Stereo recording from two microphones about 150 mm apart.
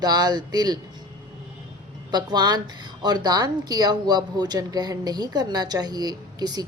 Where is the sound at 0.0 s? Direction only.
25° right (ahead or behind).